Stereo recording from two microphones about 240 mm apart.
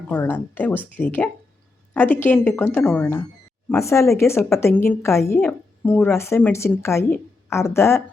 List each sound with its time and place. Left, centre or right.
0.1 s a woman's voice: centre